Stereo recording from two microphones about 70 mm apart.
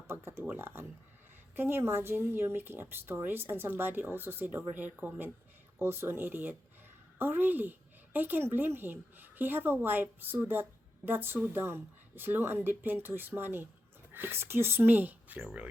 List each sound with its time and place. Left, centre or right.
0.1 s a woman's voice: right